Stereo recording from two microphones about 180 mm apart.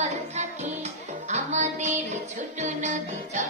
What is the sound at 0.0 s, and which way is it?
Music, 40° right (ahead or behind).